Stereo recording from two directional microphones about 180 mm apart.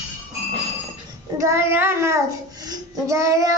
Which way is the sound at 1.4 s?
15° right (ahead or behind).